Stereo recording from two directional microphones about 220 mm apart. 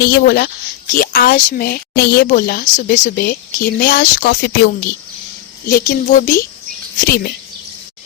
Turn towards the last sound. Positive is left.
turn(degrees=45)  # may be behind; listen again after turning